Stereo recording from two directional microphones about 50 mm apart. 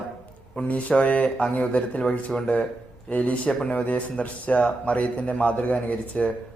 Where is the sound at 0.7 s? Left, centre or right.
Left.